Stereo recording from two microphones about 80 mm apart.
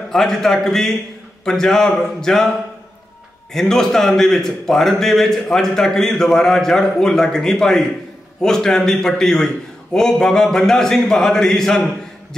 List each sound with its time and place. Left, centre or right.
0.1 s a man's voice: centre
3.5 s a man's voice: centre